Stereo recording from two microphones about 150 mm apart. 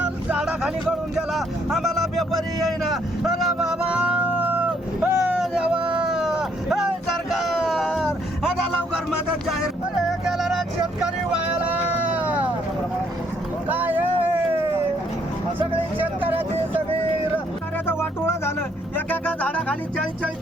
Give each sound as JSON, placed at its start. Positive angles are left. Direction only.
{"t": 0.3, "sound": "a sound", "side_deg": -5}
{"t": 9.0, "sound": "music", "side_deg": 0}
{"t": 11.0, "sound": "vehicle", "side_deg": -10}
{"t": 13.7, "sound": "vehicle", "side_deg": -10}
{"t": 17.8, "sound": "music", "side_deg": 15}